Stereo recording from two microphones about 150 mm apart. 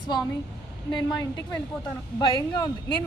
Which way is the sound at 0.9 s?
30° left (ahead or behind).